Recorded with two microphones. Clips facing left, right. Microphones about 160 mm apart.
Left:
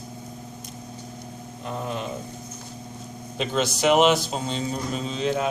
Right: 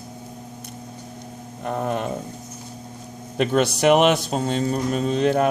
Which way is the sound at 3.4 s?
60° right (ahead or behind).